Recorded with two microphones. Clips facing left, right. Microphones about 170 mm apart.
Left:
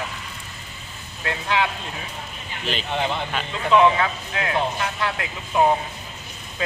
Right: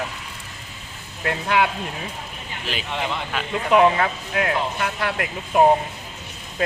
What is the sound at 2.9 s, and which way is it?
Speech, 30° left (ahead or behind).